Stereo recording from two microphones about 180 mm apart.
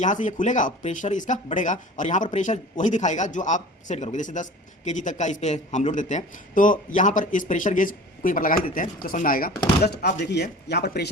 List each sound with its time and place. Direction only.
0.0 s a man's voice: 40° left (ahead or behind)
9.8 s speech: 65° left (ahead or behind)